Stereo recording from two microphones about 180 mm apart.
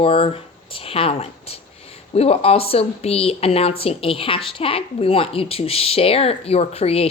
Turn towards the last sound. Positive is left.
turn(degrees=35)  # may be behind; listen again after turning